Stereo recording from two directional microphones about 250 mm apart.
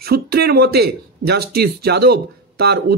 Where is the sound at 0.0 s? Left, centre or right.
Right.